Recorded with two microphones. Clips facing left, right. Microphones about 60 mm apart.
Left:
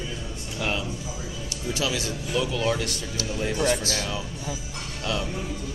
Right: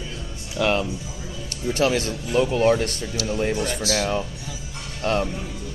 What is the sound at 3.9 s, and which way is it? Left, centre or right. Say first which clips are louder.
Speech: right 6 dB; right.